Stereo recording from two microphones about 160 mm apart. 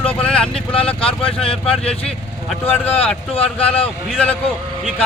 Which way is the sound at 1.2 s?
35° left (ahead or behind).